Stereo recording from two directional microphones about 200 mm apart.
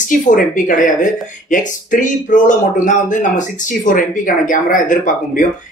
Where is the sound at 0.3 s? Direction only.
40° left (ahead or behind).